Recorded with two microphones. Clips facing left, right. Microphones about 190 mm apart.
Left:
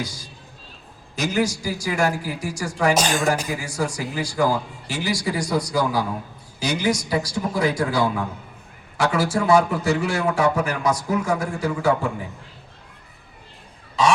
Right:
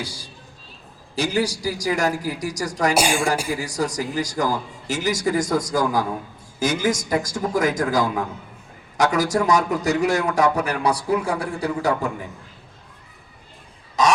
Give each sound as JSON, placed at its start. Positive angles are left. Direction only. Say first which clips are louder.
{"t": 0.0, "sound": "speech", "louder": "left 2 dB", "side_deg": -30}
{"t": 2.9, "sound": "speech", "louder": "right 2 dB", "side_deg": -10}
{"t": 3.6, "sound": "a man's voice", "louder": "right 2 dB", "side_deg": -40}
{"t": 14.0, "sound": "duck", "louder": "even", "side_deg": -40}